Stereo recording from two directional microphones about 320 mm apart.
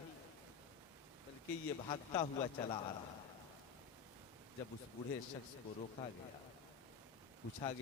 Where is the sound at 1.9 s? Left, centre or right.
Centre.